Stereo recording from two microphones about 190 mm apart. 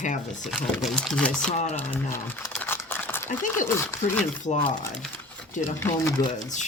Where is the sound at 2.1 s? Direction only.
10° left (ahead or behind).